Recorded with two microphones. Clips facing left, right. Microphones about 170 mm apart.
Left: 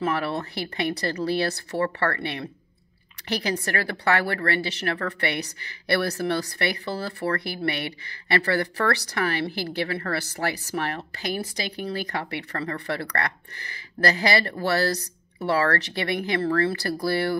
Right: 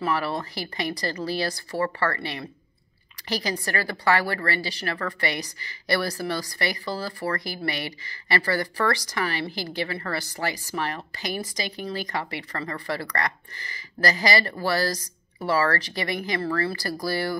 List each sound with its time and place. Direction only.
0.0 s speech: 60° left (ahead or behind)